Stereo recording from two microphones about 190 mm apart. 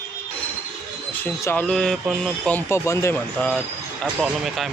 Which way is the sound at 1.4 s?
10° left (ahead or behind).